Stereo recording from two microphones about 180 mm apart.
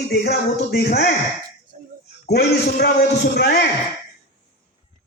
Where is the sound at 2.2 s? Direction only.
60° left (ahead or behind).